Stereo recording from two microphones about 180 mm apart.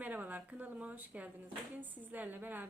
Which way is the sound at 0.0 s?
10° right (ahead or behind).